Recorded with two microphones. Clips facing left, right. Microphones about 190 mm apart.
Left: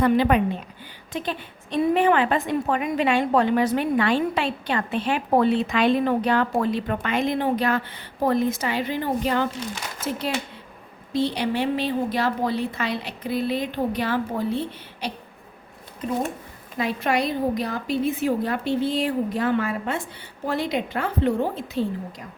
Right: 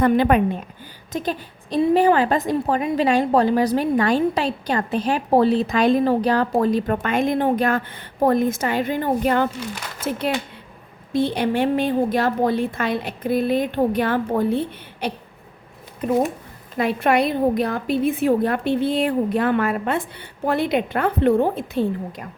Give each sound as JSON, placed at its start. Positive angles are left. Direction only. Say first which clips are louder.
{"t": 0.0, "sound": "a woman's voice", "louder": "right 2 dB", "side_deg": -50}
{"t": 11.1, "sound": "a woman's voice", "louder": "right 3 dB", "side_deg": -55}
{"t": 16.7, "sound": "a woman's voice", "louder": "right 5 dB", "side_deg": -55}